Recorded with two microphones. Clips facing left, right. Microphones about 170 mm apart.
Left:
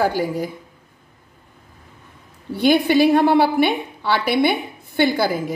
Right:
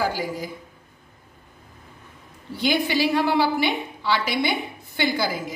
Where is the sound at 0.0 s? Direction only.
60° left (ahead or behind).